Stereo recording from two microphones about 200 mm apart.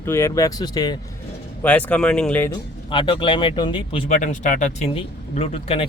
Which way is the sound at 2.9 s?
25° left (ahead or behind).